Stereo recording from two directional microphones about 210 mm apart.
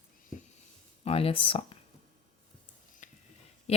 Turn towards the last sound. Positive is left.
turn(degrees=30)  # may be behind; listen again after turning